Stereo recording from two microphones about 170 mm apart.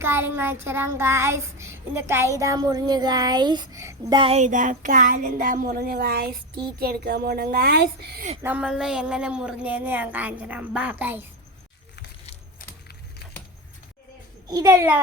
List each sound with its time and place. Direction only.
0.0 s child singing: 15° right (ahead or behind)
4.2 s a woman's voice: 40° right (ahead or behind); by 8.2 s 65° right (ahead or behind)
8.4 s child singing: 10° right (ahead or behind)
14.4 s child singing: 20° right (ahead or behind)